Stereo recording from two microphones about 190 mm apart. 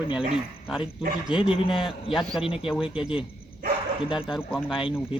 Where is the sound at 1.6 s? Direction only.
25° left (ahead or behind).